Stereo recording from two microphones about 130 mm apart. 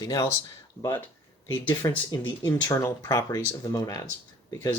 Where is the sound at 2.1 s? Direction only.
30° left (ahead or behind).